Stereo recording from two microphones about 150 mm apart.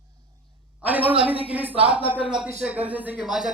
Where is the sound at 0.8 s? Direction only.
10° right (ahead or behind).